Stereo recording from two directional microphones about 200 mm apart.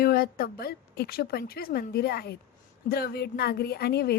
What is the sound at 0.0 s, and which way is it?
A woman's voice, 50° left (ahead or behind).